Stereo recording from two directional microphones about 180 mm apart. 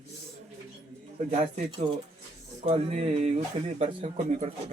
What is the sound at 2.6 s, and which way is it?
Speech, 35° right (ahead or behind).